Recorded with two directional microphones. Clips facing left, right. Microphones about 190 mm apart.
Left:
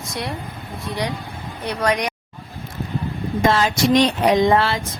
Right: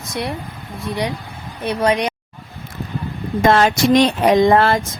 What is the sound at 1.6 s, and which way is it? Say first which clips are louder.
Speech: right 4 dB; 20° right (ahead or behind).